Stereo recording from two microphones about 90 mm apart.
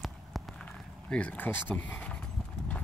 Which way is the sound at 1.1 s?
15° left (ahead or behind).